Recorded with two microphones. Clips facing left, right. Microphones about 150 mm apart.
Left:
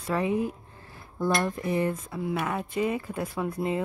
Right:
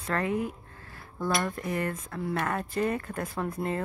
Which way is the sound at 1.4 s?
15° left (ahead or behind).